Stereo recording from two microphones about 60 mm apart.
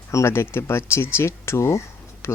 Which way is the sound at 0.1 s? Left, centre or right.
Left.